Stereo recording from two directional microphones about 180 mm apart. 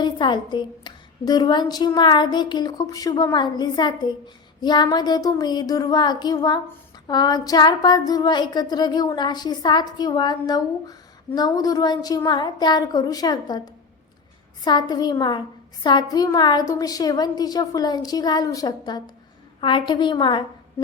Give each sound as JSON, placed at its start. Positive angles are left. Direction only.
{"t": 0.0, "sound": "a woman's voice", "side_deg": 25}
{"t": 14.6, "sound": "a woman's voice", "side_deg": 25}